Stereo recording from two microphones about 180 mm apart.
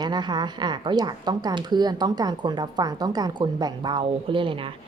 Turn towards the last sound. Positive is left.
turn(degrees=-30)  # may be behind; listen again after turning